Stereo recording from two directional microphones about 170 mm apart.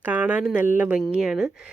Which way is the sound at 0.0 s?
10° right (ahead or behind).